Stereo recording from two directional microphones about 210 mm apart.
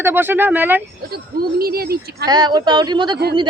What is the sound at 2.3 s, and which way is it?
Speech, 20° right (ahead or behind).